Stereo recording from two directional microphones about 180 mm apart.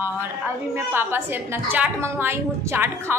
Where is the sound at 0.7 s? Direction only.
10° right (ahead or behind).